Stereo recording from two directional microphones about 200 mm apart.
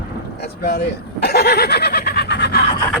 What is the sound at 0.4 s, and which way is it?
Speech, 55° left (ahead or behind).